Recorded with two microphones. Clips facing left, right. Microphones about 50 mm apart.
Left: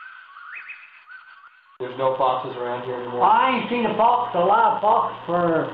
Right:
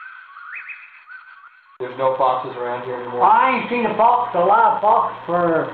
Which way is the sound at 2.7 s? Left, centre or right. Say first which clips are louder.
Right 2 dB; right.